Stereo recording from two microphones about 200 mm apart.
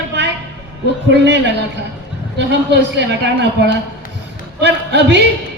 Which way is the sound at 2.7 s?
60° right (ahead or behind).